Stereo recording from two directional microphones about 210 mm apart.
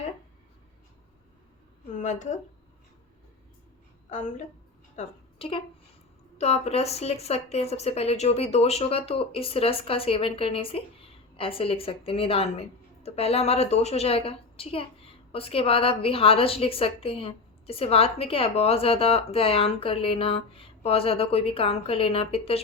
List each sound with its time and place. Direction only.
2.0 s speech: 35° left (ahead or behind)
4.1 s a woman's voice: 35° left (ahead or behind)